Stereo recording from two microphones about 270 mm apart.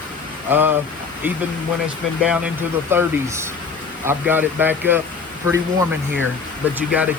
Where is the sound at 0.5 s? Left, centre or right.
Centre.